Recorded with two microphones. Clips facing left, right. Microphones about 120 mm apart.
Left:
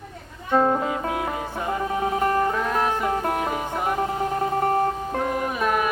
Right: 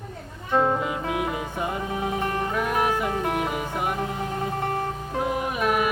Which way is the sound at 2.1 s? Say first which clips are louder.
Left 7 dB; 40° left (ahead or behind).